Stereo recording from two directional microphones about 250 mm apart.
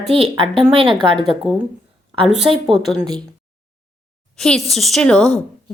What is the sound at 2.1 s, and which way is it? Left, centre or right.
Speech, right.